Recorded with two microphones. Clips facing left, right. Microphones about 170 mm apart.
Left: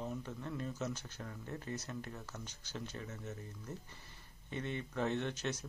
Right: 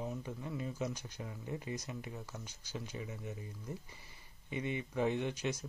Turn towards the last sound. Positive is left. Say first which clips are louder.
# right 1 dB
turn(degrees=-10)  # may be behind; listen again after turning